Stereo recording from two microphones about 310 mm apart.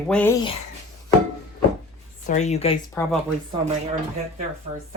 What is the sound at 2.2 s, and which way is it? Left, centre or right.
Speech, left.